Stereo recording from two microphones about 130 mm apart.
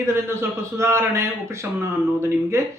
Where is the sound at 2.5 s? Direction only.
20° right (ahead or behind).